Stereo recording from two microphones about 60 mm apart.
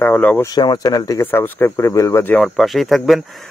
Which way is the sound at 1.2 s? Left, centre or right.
Left.